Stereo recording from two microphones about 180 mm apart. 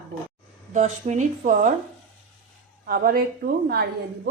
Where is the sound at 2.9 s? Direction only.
55° right (ahead or behind).